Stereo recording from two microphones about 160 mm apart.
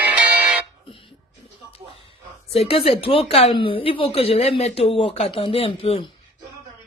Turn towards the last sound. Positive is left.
turn(degrees=35)  # may be behind; listen again after turning